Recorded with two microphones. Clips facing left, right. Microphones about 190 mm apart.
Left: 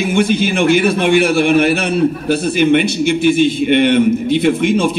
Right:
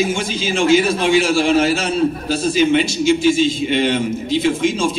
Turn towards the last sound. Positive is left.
turn(degrees=60)  # may be behind; listen again after turning